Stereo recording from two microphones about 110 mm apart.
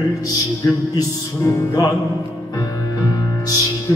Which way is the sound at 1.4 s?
30° left (ahead or behind).